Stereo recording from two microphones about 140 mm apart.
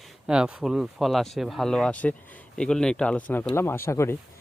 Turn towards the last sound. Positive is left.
turn(degrees=20)  # may be behind; listen again after turning